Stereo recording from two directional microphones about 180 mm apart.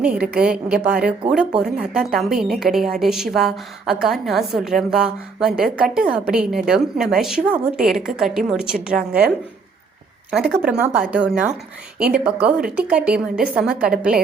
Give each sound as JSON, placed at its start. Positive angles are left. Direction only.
{"t": 0.0, "sound": "a woman's voice", "side_deg": -5}
{"t": 10.3, "sound": "a woman's voice", "side_deg": -5}